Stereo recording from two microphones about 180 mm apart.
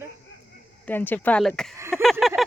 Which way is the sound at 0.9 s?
10° left (ahead or behind).